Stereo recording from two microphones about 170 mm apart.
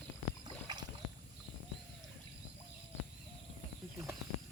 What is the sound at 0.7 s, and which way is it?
Rowboat, 25° right (ahead or behind).